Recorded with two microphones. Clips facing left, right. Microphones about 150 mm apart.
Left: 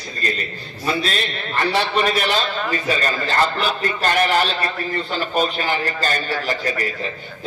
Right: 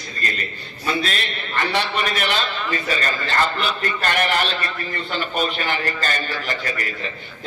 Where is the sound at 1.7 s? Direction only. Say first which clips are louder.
Left 5 dB; 35° left (ahead or behind).